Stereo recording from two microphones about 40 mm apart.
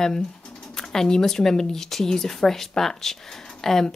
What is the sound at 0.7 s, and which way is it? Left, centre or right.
Speech, centre.